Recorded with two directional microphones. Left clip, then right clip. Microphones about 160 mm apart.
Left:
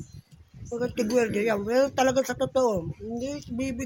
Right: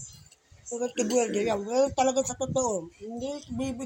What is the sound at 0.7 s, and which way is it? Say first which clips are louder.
Speech: left 2 dB; 40° left (ahead or behind).